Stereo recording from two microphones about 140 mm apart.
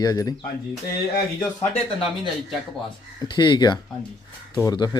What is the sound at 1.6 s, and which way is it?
Speech, 45° left (ahead or behind).